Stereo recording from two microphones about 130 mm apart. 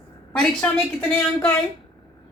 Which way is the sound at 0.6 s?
10° left (ahead or behind).